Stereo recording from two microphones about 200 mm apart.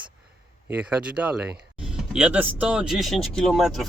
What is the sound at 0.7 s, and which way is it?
Speech, 5° right (ahead or behind).